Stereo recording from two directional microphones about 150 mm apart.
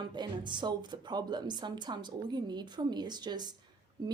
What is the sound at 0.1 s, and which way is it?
A woman's voice, 30° right (ahead or behind).